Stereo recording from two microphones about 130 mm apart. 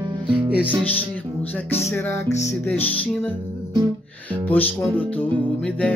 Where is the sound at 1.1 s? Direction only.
10° left (ahead or behind).